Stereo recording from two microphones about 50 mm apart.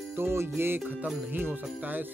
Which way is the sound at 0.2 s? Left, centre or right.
Right.